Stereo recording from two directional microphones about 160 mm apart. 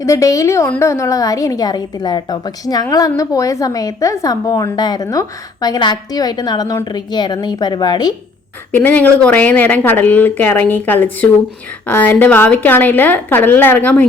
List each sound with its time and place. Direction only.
0.0 s a woman's voice: 20° left (ahead or behind)
8.7 s speech: 10° left (ahead or behind)